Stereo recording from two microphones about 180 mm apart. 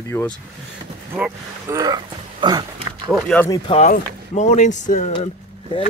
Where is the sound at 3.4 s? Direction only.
20° left (ahead or behind).